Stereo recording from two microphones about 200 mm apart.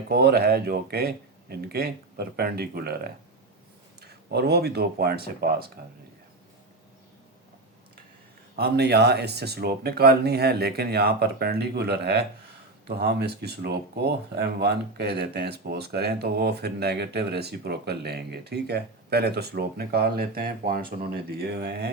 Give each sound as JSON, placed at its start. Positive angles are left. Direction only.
{"t": 0.1, "sound": "speech", "side_deg": -55}
{"t": 8.5, "sound": "speech", "side_deg": -55}